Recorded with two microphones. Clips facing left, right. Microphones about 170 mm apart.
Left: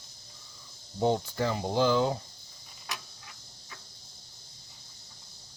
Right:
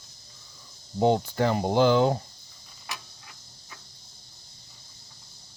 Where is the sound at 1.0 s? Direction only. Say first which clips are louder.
Right 5 dB; 70° right (ahead or behind).